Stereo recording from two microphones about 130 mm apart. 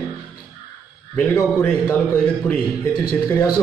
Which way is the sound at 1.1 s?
10° left (ahead or behind).